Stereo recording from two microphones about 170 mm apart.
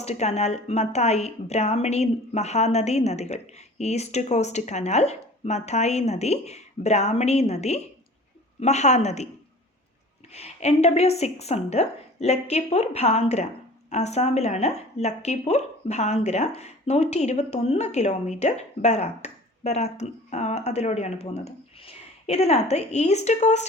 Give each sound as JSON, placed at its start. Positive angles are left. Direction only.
{"t": 0.0, "sound": "a woman's voice", "side_deg": 40}
{"t": 10.3, "sound": "a woman's voice", "side_deg": 40}